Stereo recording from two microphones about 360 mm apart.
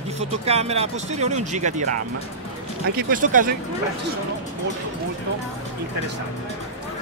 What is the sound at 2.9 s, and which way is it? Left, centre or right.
Speech, right.